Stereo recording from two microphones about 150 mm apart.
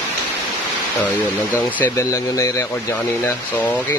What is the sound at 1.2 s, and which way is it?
Speech, 10° left (ahead or behind).